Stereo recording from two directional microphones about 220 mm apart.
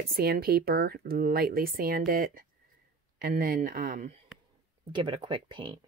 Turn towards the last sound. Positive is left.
turn(degrees=-20)  # may be behind; listen again after turning